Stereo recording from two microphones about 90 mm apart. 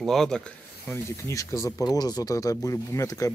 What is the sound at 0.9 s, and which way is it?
Speech, 30° left (ahead or behind).